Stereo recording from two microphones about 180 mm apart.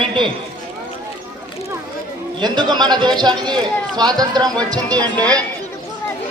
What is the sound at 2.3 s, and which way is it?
A man's voice, 25° right (ahead or behind).